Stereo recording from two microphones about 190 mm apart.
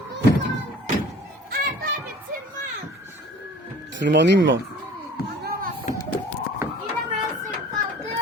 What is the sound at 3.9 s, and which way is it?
Speech, 70° right (ahead or behind).